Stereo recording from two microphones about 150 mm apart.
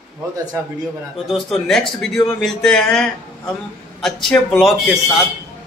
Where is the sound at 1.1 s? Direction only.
Centre (ahead or behind).